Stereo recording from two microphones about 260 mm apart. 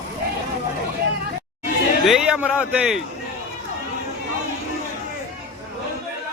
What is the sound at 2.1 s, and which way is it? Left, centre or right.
Speech, centre.